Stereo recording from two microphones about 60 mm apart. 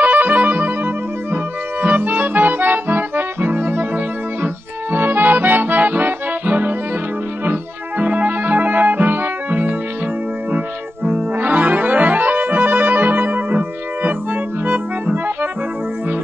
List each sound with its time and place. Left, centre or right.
0.0 s music: right
1.3 s accordion: right
4.9 s accordion: right
8.0 s music: right
11.1 s music: right